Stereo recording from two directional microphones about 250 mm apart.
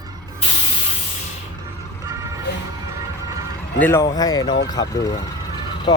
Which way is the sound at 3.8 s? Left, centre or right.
Centre.